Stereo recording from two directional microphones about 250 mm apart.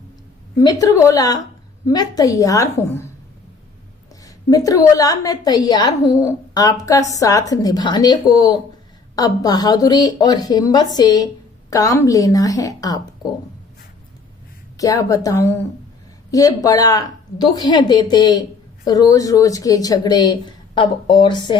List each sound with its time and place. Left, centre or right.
0.5 s a woman's voice: centre
4.2 s a woman's voice: centre
14.8 s a woman's voice: centre